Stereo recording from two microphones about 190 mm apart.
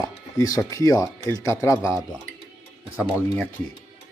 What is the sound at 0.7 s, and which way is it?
Speech, 15° left (ahead or behind).